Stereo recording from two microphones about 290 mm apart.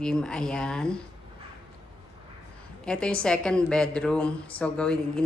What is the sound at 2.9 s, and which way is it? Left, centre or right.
Speech, centre.